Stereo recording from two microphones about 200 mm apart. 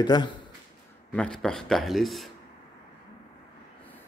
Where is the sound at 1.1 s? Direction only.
5° left (ahead or behind).